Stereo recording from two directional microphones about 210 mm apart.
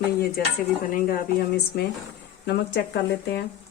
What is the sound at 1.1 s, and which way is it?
Speech, 45° left (ahead or behind).